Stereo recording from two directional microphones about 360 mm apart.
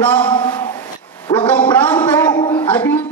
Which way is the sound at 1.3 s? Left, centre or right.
Centre.